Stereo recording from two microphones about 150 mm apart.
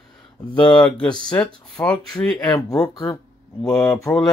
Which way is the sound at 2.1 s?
5° left (ahead or behind).